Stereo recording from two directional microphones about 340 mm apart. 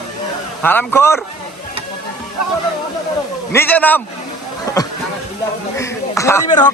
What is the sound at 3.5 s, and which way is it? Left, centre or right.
Speech, centre.